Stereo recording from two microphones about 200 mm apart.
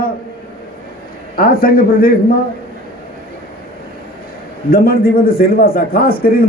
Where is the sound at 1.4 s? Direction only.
50° left (ahead or behind).